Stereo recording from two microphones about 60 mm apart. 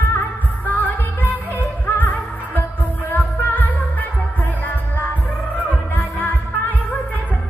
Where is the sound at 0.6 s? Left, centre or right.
Left.